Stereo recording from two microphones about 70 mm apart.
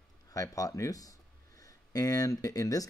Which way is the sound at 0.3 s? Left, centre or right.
Left.